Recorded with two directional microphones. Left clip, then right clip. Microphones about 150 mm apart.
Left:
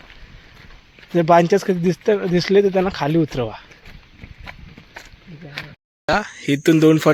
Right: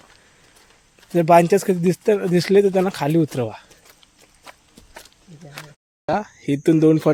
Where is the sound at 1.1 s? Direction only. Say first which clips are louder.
Even; 10° right (ahead or behind).